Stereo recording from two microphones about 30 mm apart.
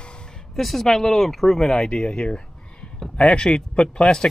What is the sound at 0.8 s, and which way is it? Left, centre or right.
Speech, centre.